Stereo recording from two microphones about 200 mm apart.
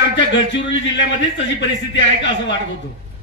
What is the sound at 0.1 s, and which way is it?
A man's voice, 65° left (ahead or behind).